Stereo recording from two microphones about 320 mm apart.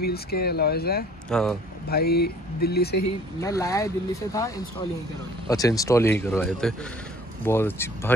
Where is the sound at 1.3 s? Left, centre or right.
Centre.